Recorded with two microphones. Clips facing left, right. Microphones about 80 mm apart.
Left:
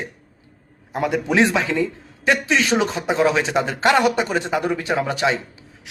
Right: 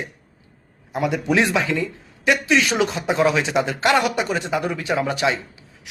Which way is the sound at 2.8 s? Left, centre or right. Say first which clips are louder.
Even; left.